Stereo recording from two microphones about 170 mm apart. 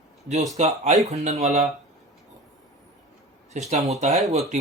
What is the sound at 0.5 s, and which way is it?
Speech, 40° right (ahead or behind).